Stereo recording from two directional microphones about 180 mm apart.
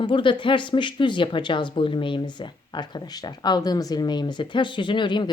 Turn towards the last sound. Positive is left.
turn(degrees=25)  # may be behind; listen again after turning